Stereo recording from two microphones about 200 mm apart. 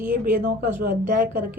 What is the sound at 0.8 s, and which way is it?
Speech, 45° right (ahead or behind).